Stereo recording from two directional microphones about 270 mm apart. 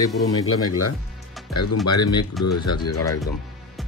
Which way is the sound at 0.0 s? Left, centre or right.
Centre.